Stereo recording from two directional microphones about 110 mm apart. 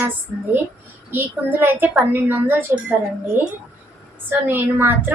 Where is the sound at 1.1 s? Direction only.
15° right (ahead or behind).